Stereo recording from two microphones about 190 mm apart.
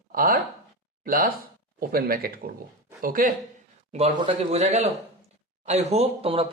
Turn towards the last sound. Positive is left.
turn(degrees=-30)  # may be behind; listen again after turning